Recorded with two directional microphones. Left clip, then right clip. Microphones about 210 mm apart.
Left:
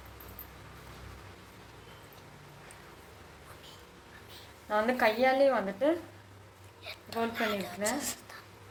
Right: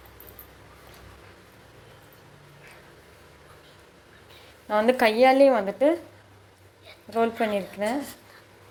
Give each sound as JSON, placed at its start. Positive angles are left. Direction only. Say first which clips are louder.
{"t": 4.7, "sound": "a woman's voice", "louder": "right 7 dB", "side_deg": -40}
{"t": 7.2, "sound": "a woman's voice", "louder": "right 8 dB", "side_deg": -40}